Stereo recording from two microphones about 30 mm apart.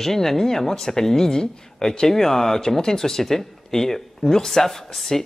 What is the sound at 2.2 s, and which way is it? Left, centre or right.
Speech, centre.